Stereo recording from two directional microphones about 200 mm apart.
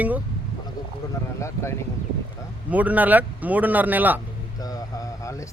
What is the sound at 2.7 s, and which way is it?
Speech, 10° right (ahead or behind).